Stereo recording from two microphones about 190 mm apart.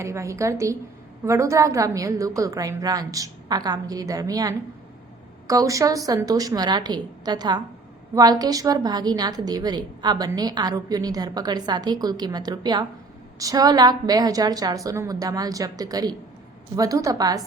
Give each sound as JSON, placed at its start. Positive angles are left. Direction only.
{"t": 0.0, "sound": "a woman's voice", "side_deg": -15}